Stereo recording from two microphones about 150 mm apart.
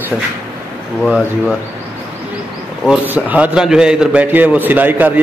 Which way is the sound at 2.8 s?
10° right (ahead or behind).